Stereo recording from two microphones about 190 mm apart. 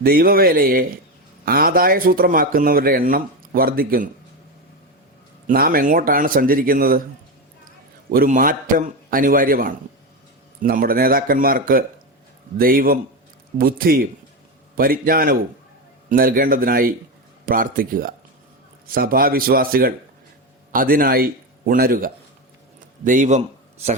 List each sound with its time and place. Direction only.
0.0 s speech: 50° right (ahead or behind)
5.5 s speech: 50° right (ahead or behind)
8.1 s a man's voice: 50° right (ahead or behind)